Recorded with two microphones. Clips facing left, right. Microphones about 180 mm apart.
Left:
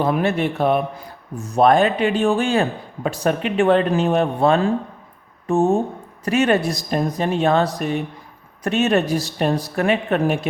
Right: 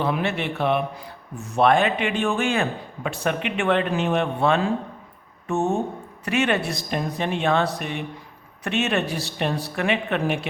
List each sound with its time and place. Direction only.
0.0 s speech: 40° left (ahead or behind)